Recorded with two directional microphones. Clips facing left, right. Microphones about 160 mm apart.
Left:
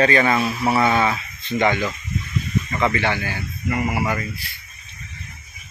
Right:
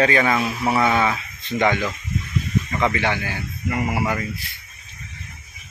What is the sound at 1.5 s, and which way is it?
Speech, 15° left (ahead or behind).